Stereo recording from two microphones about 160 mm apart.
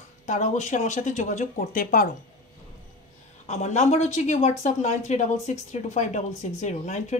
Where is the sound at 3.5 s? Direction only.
45° left (ahead or behind).